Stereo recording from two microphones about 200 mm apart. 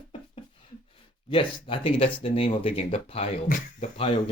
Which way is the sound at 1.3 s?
25° left (ahead or behind).